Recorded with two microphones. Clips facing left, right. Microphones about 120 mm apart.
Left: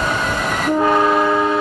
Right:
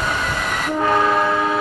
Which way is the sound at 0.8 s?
10° left (ahead or behind).